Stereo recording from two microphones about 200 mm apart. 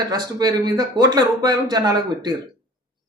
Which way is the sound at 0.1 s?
20° right (ahead or behind).